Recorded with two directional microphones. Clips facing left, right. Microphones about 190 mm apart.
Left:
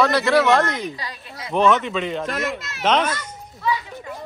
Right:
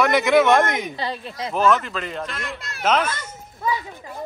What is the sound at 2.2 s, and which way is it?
Speech, 50° left (ahead or behind).